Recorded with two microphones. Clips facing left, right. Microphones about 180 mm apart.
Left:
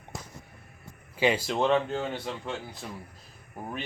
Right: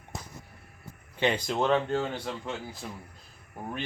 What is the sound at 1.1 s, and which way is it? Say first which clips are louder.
A man's voice: left 2 dB; 5° left (ahead or behind).